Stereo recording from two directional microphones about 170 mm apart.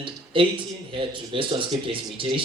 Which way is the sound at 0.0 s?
30° right (ahead or behind).